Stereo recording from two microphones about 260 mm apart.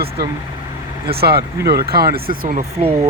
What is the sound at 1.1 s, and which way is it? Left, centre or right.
Speech, right.